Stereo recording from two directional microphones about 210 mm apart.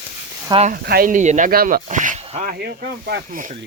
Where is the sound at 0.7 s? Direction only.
45° right (ahead or behind); by 2.4 s 30° right (ahead or behind).